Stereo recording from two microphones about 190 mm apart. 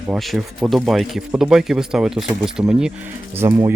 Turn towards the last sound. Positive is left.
turn(degrees=-15)  # may be behind; listen again after turning